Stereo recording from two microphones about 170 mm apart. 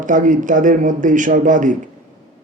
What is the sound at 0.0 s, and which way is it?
A man's voice, 50° right (ahead or behind).